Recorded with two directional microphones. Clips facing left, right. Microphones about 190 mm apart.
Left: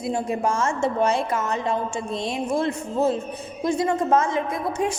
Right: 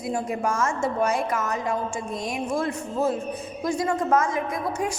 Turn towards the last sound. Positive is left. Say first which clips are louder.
# left 2 dB
turn(degrees=25)  # may be behind; listen again after turning